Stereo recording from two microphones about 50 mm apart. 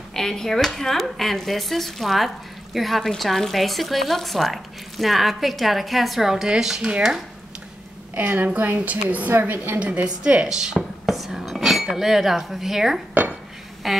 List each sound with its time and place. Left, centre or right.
0.1 s speech: centre
8.1 s a woman's voice: right
9.3 s a woman's voice: right
9.8 s a woman's voice: right
11.1 s cutlery: centre
13.8 s speech: centre